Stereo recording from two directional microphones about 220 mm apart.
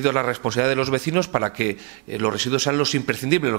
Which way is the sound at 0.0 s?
15° right (ahead or behind).